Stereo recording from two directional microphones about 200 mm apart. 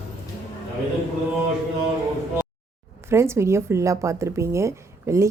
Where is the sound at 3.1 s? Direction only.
15° right (ahead or behind).